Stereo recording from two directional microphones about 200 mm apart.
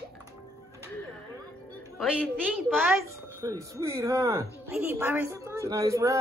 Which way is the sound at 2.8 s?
15° right (ahead or behind).